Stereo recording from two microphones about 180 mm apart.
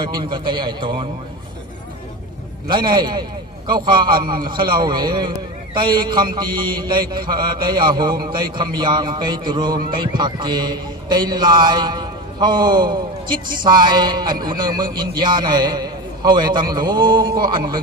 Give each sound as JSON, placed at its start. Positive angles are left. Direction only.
{"t": 0.0, "sound": "a man's voice", "side_deg": -25}
{"t": 2.6, "sound": "a man's voice", "side_deg": -25}
{"t": 8.1, "sound": "a man's voice", "side_deg": -55}
{"t": 8.4, "sound": "a man's voice", "side_deg": -25}